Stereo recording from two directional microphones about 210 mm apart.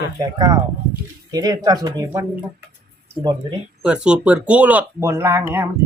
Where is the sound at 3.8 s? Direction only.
5° right (ahead or behind).